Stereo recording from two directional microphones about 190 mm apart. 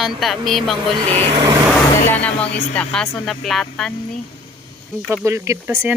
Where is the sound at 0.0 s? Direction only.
Centre (ahead or behind).